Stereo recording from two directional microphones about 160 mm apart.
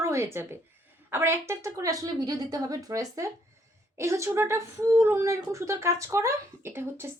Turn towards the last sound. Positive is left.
turn(degrees=-15)  # may be behind; listen again after turning